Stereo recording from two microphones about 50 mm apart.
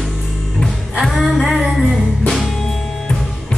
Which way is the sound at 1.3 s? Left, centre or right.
Centre.